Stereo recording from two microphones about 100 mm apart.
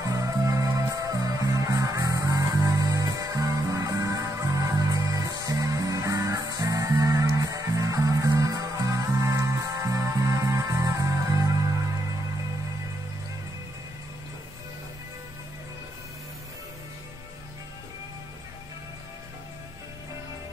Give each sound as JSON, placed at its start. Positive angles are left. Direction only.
{"t": 0.0, "sound": "music", "side_deg": -35}